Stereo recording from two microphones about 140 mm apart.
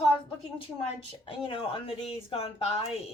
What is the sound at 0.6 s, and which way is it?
A woman's voice, 40° left (ahead or behind).